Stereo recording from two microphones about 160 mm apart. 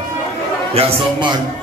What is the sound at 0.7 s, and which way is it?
Speech, 40° right (ahead or behind).